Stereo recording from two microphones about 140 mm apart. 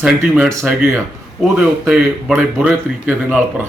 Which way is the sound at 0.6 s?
10° right (ahead or behind).